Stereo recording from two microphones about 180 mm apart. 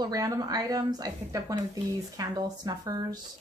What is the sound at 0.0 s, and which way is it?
A woman's voice, 20° right (ahead or behind).